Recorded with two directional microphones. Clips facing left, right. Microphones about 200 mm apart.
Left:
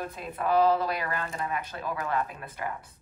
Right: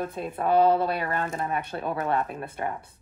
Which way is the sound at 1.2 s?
45° right (ahead or behind).